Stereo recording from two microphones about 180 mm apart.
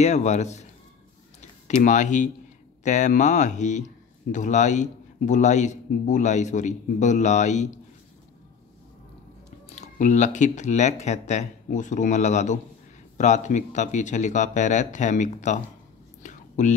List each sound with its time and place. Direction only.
0.0 s a man's voice: 40° left (ahead or behind)
1.8 s a man's voice: 45° left (ahead or behind)
9.8 s a man's voice: 45° left (ahead or behind)
16.2 s whispering: 40° left (ahead or behind)